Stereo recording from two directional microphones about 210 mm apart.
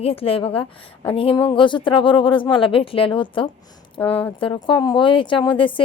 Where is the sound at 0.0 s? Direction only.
25° left (ahead or behind).